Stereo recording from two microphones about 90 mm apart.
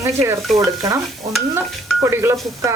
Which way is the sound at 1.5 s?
30° right (ahead or behind).